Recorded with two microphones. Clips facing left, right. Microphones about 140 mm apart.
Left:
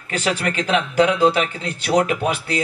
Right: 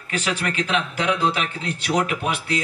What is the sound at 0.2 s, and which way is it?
Speech, 35° left (ahead or behind).